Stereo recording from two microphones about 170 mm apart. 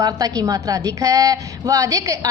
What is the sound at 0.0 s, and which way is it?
A woman's voice, 20° right (ahead or behind).